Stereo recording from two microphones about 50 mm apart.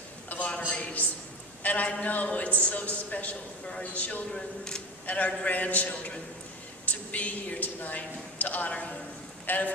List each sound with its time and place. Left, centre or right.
0.3 s a sound: left
1.6 s a man's voice: left
4.3 s speech: centre
5.0 s speech: left